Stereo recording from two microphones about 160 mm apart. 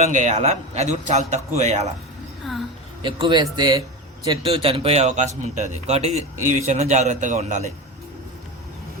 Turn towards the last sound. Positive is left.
turn(degrees=-45)  # may be behind; listen again after turning